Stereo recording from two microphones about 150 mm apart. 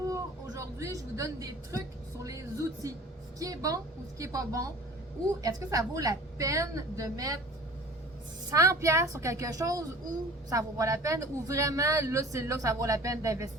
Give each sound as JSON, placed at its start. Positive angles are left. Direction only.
{"t": 0.1, "sound": "a woman's voice", "side_deg": -20}
{"t": 2.8, "sound": "speech", "side_deg": -20}
{"t": 8.4, "sound": "speech", "side_deg": -20}